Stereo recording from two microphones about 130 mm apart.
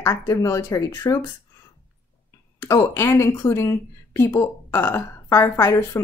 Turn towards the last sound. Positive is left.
turn(degrees=20)  # may be behind; listen again after turning